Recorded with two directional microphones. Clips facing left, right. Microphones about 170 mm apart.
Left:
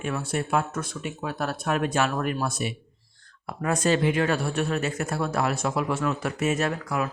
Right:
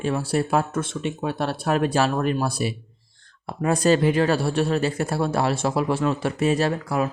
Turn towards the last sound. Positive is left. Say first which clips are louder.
# right 4 dB
turn(degrees=-30)  # may be behind; listen again after turning